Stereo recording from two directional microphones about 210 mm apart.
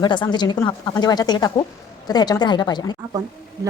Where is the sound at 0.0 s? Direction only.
20° left (ahead or behind).